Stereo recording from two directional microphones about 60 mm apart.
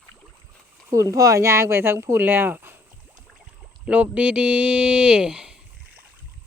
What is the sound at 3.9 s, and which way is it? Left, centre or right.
Speech, right.